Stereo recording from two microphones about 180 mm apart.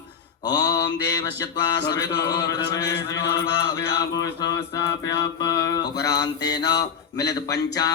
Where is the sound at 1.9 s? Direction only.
20° left (ahead or behind).